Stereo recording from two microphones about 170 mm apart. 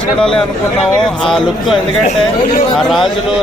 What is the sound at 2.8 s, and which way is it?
Speech, centre (ahead or behind).